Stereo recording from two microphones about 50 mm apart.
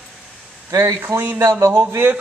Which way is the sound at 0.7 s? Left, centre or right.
Right.